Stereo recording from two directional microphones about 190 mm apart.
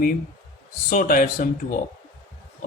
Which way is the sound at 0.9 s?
45° left (ahead or behind).